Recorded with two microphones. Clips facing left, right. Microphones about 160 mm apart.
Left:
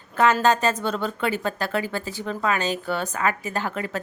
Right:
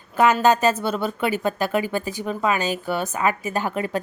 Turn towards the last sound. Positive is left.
turn(degrees=-15)  # may be behind; listen again after turning